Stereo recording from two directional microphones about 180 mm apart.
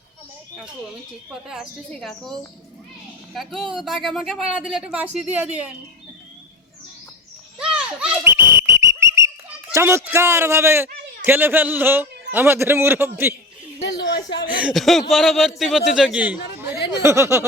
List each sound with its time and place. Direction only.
1.3 s speech: 5° right (ahead or behind)
7.6 s a sound: 5° right (ahead or behind)
9.0 s whistle: 15° right (ahead or behind)
9.7 s a man's voice: 15° right (ahead or behind)
13.8 s a sound: 70° left (ahead or behind)
14.6 s a man's voice: centre (ahead or behind); by 17.4 s 15° right (ahead or behind)